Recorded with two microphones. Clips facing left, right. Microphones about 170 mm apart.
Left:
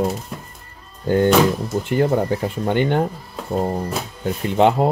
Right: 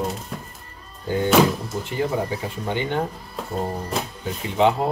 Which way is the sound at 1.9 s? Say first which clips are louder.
Left 6 dB; 55° left (ahead or behind).